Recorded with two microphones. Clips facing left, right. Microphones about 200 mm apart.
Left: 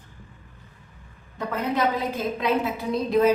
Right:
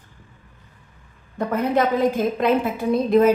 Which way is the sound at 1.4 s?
50° right (ahead or behind).